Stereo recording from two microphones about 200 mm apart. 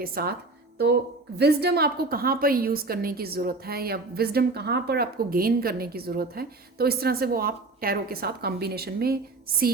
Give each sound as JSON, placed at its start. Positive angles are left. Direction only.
{"t": 0.0, "sound": "a woman's voice", "side_deg": -50}
{"t": 1.4, "sound": "a woman's voice", "side_deg": -55}